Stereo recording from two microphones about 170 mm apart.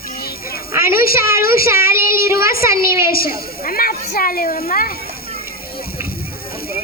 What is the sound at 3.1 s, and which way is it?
A child's voice, 60° left (ahead or behind).